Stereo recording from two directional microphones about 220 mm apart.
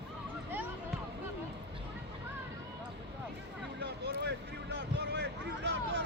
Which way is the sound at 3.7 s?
50° right (ahead or behind).